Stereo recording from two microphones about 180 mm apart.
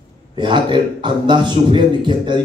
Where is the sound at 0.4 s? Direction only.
25° right (ahead or behind).